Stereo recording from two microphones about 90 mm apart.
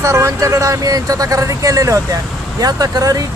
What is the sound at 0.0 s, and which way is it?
Speech, 30° right (ahead or behind).